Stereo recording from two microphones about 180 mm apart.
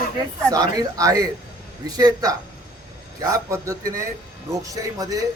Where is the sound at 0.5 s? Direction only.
20° right (ahead or behind).